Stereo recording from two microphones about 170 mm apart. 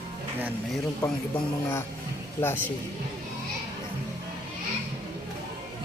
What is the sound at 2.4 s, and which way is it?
Speech, 10° left (ahead or behind).